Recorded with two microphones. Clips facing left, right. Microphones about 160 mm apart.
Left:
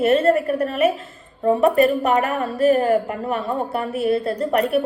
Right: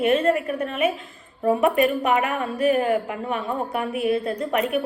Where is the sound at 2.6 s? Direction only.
40° left (ahead or behind).